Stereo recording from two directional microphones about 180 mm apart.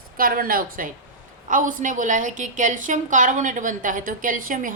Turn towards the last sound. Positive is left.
turn(degrees=-50)  # may be behind; listen again after turning